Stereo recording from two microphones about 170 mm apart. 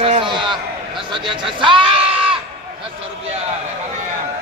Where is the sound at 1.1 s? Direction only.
30° right (ahead or behind).